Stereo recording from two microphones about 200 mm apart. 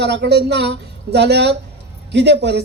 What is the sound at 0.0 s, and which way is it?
Speech, 60° right (ahead or behind).